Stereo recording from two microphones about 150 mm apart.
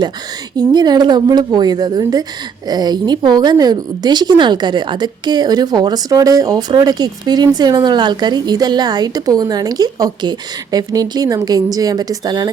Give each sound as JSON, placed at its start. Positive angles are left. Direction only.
{"t": 0.5, "sound": "a woman's voice", "side_deg": -30}